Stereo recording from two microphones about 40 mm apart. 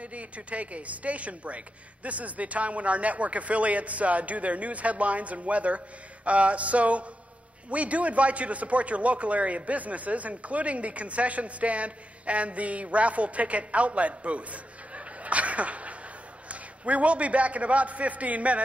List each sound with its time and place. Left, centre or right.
0.0 s speech: right